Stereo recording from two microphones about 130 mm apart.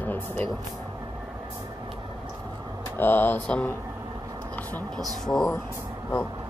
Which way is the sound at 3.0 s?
15° left (ahead or behind).